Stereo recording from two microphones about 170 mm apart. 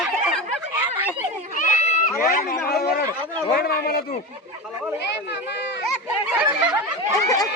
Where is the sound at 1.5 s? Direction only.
45° left (ahead or behind); by 4.0 s 65° left (ahead or behind).